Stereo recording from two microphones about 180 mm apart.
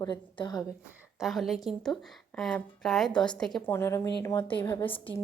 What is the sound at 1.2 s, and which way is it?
A woman's voice, centre (ahead or behind).